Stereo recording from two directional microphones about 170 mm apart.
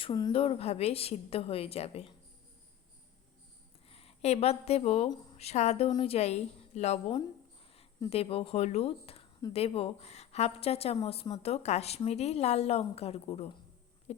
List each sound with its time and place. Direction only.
0.0 s a woman's voice: 25° left (ahead or behind)
3.8 s a woman's voice: 35° left (ahead or behind)
8.1 s a woman's voice: 35° left (ahead or behind)
14.1 s a sound: 40° left (ahead or behind)